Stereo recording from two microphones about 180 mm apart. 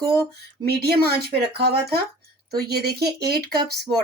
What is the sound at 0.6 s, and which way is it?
Speech, 60° right (ahead or behind).